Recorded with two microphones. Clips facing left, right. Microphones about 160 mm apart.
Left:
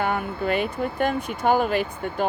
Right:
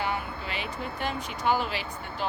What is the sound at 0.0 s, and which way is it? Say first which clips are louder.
Speech: left 7 dB; 50° left (ahead or behind).